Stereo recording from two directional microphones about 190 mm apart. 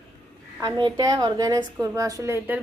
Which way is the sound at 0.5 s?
20° right (ahead or behind).